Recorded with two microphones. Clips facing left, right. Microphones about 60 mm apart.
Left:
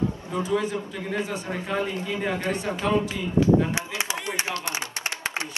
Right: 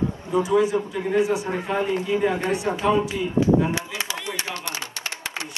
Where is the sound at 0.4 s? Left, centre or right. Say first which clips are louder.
Right 6 dB; centre.